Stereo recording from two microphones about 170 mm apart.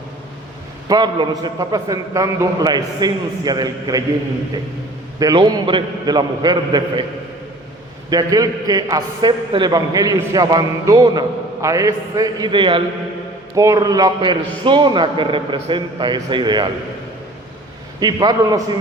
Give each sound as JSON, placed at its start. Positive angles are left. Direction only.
{"t": 0.9, "sound": "a man's voice", "side_deg": -25}
{"t": 5.2, "sound": "a man's voice", "side_deg": -25}
{"t": 8.1, "sound": "a man's voice", "side_deg": -20}
{"t": 18.0, "sound": "a man's voice", "side_deg": -25}